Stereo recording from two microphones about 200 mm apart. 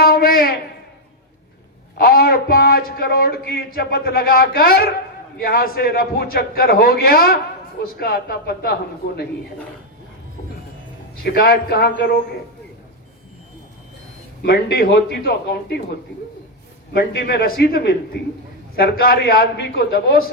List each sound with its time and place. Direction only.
0.0 s a sound: 50° left (ahead or behind)
2.0 s a man's voice: 50° left (ahead or behind)
11.2 s a man's voice: 50° left (ahead or behind)
14.4 s a man's voice: 55° left (ahead or behind)
16.9 s a man's voice: 50° left (ahead or behind)